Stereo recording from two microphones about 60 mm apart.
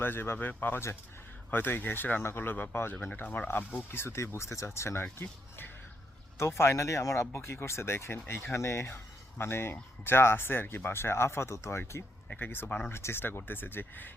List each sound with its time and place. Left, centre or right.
0.0 s speech: left
3.9 s speech: left
5.2 s speech: left
6.3 s speech: left
12.4 s speech: left
12.9 s speech: left